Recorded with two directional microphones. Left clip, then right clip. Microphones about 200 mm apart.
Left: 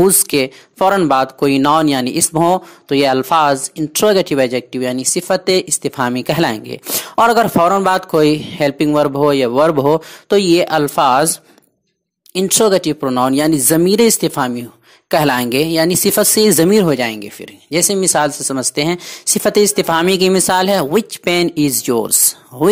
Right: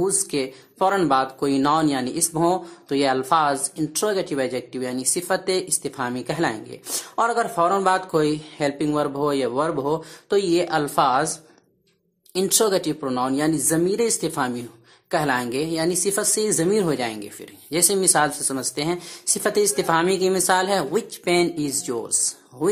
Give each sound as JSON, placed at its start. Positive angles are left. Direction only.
{"t": 0.0, "sound": "speech", "side_deg": 35}
{"t": 12.4, "sound": "speech", "side_deg": 30}